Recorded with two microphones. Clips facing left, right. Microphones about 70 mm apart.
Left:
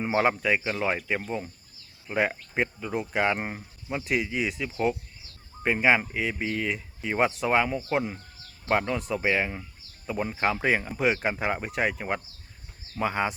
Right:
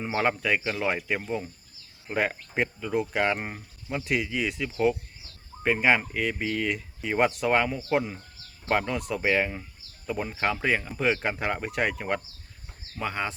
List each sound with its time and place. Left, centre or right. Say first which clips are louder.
0.0 s speech: left 2 dB; centre
0.3 s speech: left 1 dB; centre
13.0 s speech: left 4 dB; centre